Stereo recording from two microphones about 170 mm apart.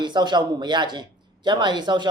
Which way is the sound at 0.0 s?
25° right (ahead or behind).